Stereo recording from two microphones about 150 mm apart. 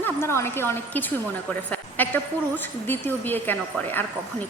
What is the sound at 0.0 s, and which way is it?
A woman's voice, 15° left (ahead or behind).